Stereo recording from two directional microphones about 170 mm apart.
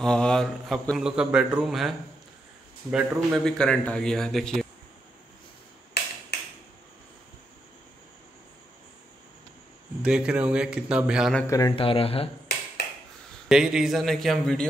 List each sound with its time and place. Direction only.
0.0 s a man's voice: 5° left (ahead or behind)
10.0 s a man's voice: 5° right (ahead or behind)
11.4 s a man's voice: 20° left (ahead or behind)
11.7 s speech: 30° left (ahead or behind)
13.5 s a man's voice: 5° right (ahead or behind)